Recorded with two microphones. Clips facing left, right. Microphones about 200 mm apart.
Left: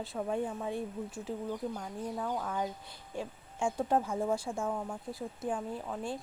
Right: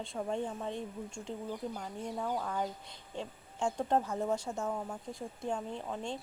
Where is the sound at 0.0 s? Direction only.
5° left (ahead or behind).